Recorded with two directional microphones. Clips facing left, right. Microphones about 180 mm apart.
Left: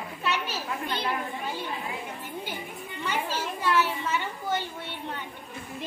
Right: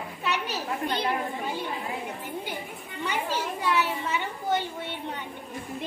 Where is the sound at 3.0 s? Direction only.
15° right (ahead or behind).